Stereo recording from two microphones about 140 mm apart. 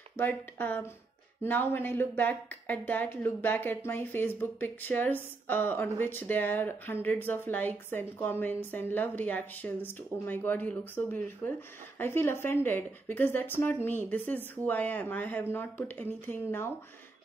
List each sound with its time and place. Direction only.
0.2 s speech: 10° left (ahead or behind)